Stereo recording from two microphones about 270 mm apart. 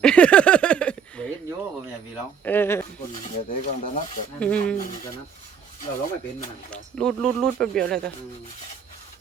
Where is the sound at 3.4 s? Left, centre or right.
Left.